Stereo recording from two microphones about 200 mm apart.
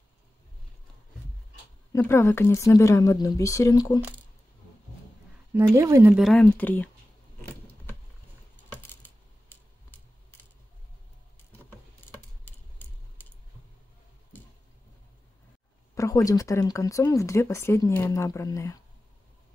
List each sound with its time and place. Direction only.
1.9 s speech: 10° left (ahead or behind)
5.5 s a woman's voice: 15° right (ahead or behind)
6.2 s speech: 5° left (ahead or behind)
8.8 s a sound: 10° left (ahead or behind)
12.4 s a sound: 10° left (ahead or behind)
15.9 s speech: 15° left (ahead or behind)